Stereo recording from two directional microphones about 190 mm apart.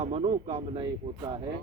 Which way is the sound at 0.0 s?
30° right (ahead or behind).